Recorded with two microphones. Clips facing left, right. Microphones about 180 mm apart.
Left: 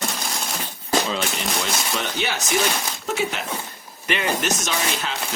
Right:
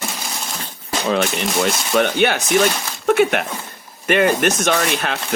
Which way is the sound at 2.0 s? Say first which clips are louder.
Right 10 dB; 60° right (ahead or behind).